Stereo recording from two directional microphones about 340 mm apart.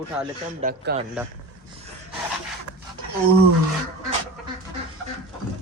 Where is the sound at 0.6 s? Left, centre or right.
Right.